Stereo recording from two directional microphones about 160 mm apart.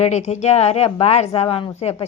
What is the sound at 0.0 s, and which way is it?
A woman's voice, 45° left (ahead or behind).